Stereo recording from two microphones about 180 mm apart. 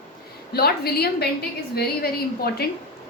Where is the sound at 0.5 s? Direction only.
60° left (ahead or behind).